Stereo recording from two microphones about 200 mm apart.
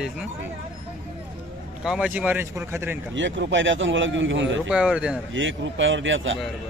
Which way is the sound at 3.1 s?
65° right (ahead or behind).